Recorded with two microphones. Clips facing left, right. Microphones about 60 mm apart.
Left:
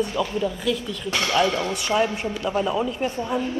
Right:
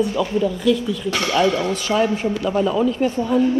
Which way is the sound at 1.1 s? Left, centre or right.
Right.